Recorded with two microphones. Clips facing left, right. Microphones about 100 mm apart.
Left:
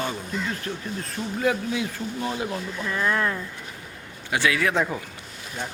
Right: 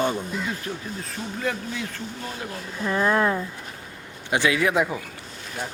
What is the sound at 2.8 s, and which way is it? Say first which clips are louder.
Speech: right 4 dB; 20° right (ahead or behind).